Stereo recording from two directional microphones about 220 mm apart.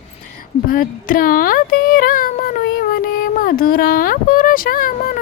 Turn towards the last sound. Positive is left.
turn(degrees=40)  # may be behind; listen again after turning